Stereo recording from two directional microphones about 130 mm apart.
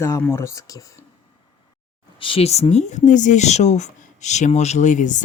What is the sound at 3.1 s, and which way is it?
Speech, 70° left (ahead or behind).